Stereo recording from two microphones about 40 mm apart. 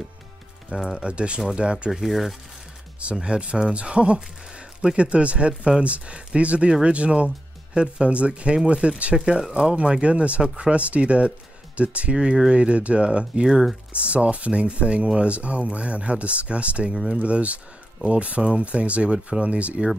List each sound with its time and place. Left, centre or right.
0.7 s speech: centre
1.9 s speech: centre
3.0 s speech: right
13.9 s speech: right
16.9 s speech: centre
17.2 s speech: right